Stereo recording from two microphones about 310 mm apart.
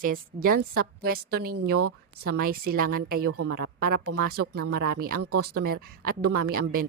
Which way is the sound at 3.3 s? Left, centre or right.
Right.